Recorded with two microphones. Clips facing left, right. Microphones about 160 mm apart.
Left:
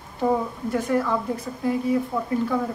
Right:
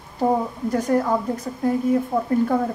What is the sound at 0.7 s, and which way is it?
Speech, 40° right (ahead or behind).